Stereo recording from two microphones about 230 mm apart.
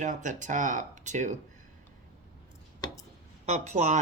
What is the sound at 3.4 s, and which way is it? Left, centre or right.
Speech, right.